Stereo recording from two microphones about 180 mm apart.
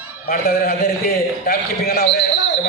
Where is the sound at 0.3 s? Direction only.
55° left (ahead or behind).